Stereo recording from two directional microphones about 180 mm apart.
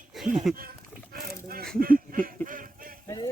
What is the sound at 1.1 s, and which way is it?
Speech, 55° right (ahead or behind).